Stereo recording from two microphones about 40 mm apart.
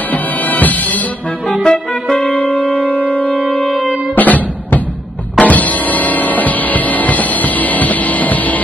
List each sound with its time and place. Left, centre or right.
0.1 s music: left
1.5 s music: centre
2.7 s wind instrument: left
3.5 s music: centre
4.1 s music: left